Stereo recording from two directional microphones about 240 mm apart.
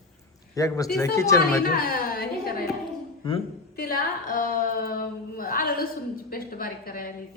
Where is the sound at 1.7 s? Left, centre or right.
Left.